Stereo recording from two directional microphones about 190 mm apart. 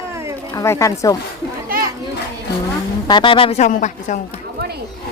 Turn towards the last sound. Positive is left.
turn(degrees=40)  # may be behind; listen again after turning